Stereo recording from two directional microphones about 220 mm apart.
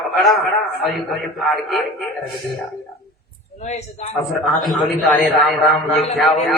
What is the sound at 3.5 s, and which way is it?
Speech, 30° left (ahead or behind).